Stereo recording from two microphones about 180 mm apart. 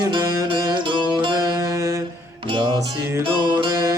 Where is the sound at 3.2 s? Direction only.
30° right (ahead or behind).